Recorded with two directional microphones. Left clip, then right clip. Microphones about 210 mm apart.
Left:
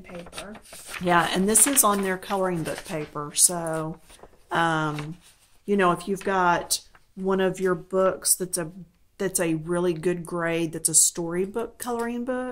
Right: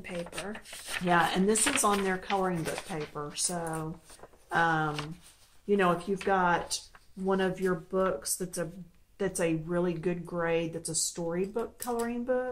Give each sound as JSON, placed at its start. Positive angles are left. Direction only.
{"t": 1.0, "sound": "speech", "side_deg": 55}